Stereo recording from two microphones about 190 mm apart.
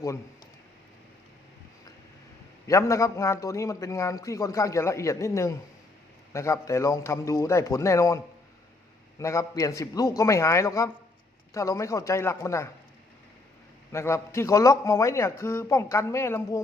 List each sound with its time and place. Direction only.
2.6 s a man's voice: 15° left (ahead or behind)
13.9 s a man's voice: 15° left (ahead or behind)